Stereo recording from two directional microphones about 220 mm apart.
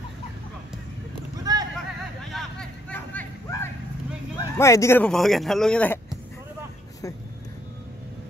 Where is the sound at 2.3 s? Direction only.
Centre (ahead or behind).